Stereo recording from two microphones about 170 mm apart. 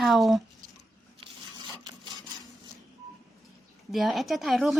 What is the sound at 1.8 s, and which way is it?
Rub, 25° right (ahead or behind).